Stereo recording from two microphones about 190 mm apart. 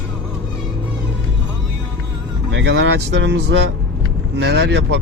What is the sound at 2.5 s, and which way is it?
Speech, 70° right (ahead or behind).